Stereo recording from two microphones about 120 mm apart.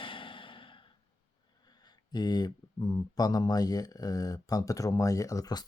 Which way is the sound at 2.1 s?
35° left (ahead or behind).